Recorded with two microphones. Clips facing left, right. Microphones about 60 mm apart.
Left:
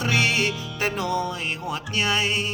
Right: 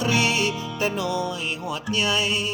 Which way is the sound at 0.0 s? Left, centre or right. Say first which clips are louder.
Even; left.